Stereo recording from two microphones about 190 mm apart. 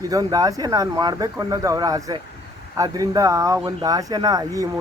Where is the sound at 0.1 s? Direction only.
20° right (ahead or behind).